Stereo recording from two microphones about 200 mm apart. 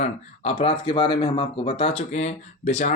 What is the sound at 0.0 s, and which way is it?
Speech, 35° left (ahead or behind).